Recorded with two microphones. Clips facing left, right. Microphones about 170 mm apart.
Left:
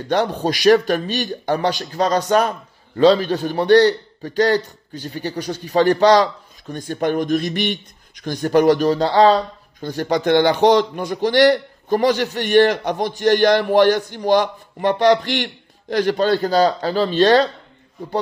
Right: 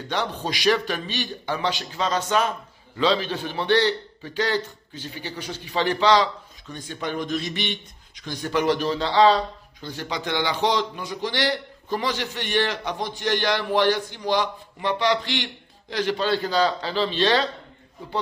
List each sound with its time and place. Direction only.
0.1 s speech: 45° left (ahead or behind)